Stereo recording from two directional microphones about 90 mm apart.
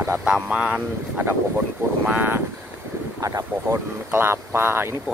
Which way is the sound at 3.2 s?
40° right (ahead or behind).